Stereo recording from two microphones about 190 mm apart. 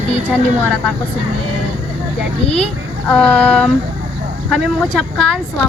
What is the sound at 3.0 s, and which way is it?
Speech, 5° left (ahead or behind).